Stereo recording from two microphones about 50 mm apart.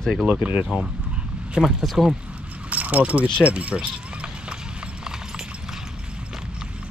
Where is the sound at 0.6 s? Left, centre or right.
Centre.